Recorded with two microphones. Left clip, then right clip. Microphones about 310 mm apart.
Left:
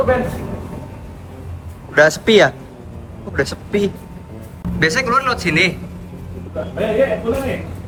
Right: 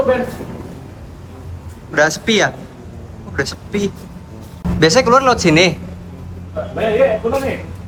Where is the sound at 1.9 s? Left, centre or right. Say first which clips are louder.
Left 3 dB; centre.